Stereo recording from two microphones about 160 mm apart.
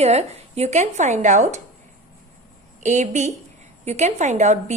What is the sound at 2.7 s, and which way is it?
Speech, 45° right (ahead or behind).